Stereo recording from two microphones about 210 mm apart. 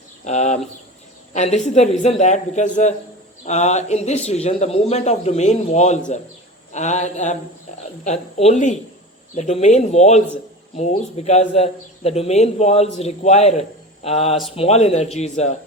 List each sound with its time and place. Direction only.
0.3 s a man's voice: 35° left (ahead or behind)